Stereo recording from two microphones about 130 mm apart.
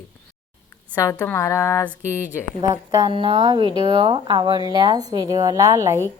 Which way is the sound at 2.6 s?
30° right (ahead or behind).